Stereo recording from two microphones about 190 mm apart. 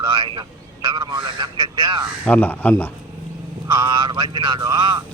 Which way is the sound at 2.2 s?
10° left (ahead or behind).